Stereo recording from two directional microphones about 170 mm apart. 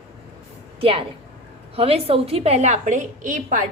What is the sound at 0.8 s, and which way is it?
A woman's voice, 35° right (ahead or behind).